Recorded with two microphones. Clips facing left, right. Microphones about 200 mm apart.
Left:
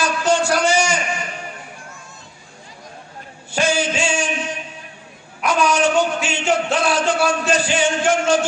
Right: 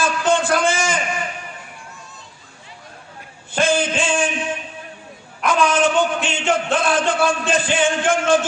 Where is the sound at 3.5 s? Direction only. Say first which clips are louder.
Right 1 dB; 55° right (ahead or behind).